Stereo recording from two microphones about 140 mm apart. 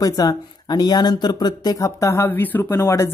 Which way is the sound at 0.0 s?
25° left (ahead or behind).